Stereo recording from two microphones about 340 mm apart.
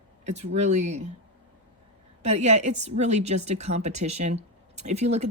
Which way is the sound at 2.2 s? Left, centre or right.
Centre.